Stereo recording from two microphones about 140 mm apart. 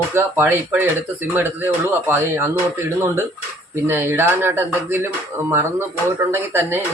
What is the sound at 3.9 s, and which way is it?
Speech, 15° right (ahead or behind).